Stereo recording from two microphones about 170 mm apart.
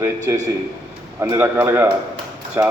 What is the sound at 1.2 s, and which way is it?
A man's voice, 15° right (ahead or behind).